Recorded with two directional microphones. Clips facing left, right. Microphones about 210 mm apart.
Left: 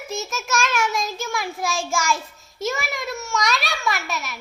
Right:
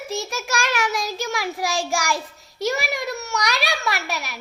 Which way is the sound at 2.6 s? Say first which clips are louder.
Right 2 dB; 15° right (ahead or behind).